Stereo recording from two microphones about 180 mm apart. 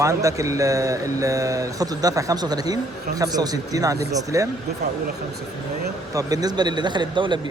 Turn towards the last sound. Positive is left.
turn(degrees=-25)  # may be behind; listen again after turning